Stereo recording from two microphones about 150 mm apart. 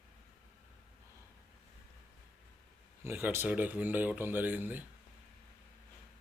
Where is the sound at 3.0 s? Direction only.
15° right (ahead or behind).